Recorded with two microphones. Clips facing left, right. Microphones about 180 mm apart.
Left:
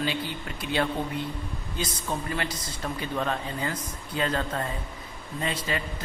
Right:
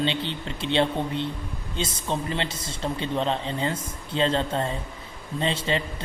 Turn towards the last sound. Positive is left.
turn(degrees=-25)  # may be behind; listen again after turning